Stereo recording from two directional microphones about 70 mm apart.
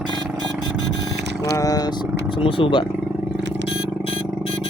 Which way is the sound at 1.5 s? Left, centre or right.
Left.